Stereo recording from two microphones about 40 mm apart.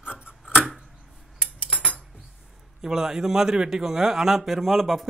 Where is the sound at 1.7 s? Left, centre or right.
Left.